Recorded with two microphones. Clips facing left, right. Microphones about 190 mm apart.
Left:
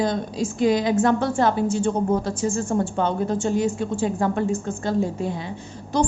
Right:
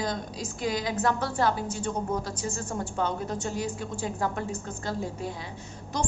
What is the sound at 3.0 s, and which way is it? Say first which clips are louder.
A woman's voice: left 7 dB; 25° left (ahead or behind).